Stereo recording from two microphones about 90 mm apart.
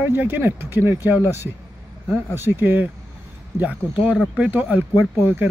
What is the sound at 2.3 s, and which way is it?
Speech, 25° right (ahead or behind).